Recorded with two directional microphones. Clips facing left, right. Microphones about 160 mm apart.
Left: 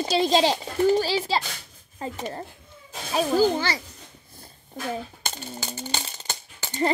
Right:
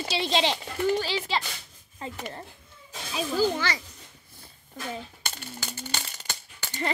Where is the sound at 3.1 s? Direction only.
50° left (ahead or behind).